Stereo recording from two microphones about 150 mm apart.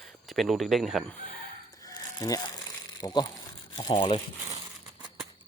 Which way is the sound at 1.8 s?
25° left (ahead or behind).